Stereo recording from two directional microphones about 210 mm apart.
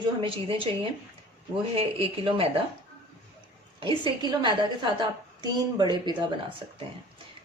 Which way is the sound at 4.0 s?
20° right (ahead or behind).